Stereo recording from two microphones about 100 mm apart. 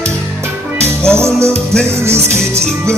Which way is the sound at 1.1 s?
25° right (ahead or behind).